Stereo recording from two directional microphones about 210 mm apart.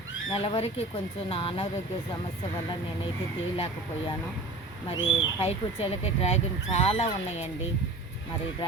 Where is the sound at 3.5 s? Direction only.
25° left (ahead or behind).